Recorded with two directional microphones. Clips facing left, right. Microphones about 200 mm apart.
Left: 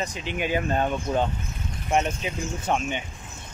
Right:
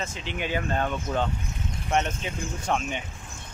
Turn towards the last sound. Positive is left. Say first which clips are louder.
# left 2 dB
turn(degrees=0)  # may be behind; listen again after turning